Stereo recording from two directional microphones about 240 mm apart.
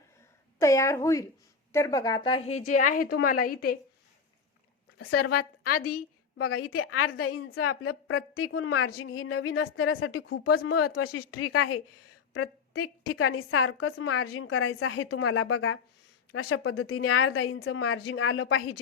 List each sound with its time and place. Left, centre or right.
0.6 s a woman's voice: centre; by 3.8 s left
4.9 s a woman's voice: left
10.4 s a woman's voice: left